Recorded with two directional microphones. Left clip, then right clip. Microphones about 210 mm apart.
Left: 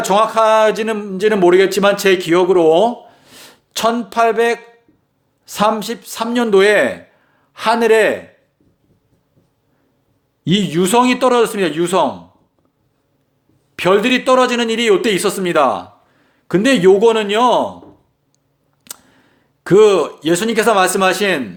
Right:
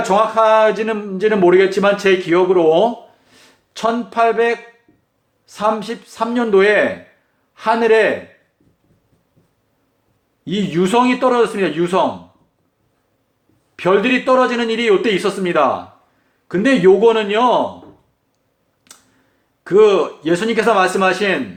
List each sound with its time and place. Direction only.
0.0 s a man's voice: 50° left (ahead or behind)
10.4 s a man's voice: 50° left (ahead or behind)
13.7 s a man's voice: 50° left (ahead or behind)
18.9 s a sound: 50° left (ahead or behind)
19.6 s a man's voice: 50° left (ahead or behind)